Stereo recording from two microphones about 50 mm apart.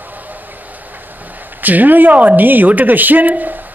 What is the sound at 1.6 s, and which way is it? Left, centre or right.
Speech, right.